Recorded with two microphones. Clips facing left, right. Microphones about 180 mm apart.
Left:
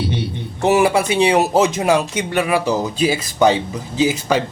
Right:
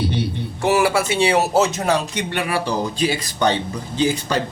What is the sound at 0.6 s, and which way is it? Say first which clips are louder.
Speech: left 3 dB; 20° left (ahead or behind).